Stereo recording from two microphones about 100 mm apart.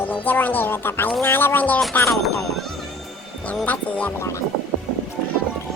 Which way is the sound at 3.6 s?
15° left (ahead or behind).